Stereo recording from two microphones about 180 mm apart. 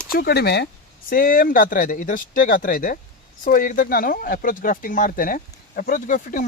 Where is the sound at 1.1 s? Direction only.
50° left (ahead or behind).